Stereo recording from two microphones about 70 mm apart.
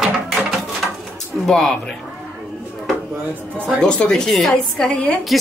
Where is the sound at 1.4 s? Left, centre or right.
Centre.